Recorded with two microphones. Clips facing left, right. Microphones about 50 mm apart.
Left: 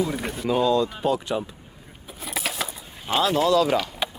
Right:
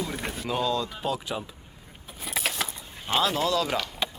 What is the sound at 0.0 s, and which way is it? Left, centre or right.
Speech, centre.